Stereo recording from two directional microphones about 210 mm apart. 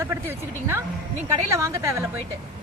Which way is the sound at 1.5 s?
15° right (ahead or behind).